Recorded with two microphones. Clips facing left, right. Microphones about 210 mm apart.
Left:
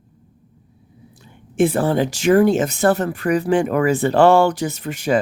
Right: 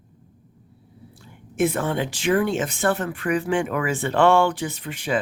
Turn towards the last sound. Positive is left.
turn(degrees=45)  # may be behind; listen again after turning